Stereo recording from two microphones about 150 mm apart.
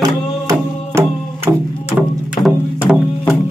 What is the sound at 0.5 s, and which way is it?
Music, 15° right (ahead or behind).